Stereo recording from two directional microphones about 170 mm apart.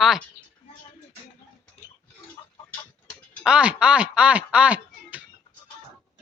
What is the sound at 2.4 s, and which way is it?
Tick-tock, 20° left (ahead or behind).